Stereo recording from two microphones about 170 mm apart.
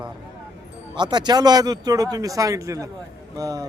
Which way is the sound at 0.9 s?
25° right (ahead or behind).